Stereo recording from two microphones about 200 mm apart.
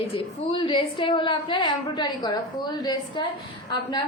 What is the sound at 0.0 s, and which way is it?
A woman's voice, 25° left (ahead or behind).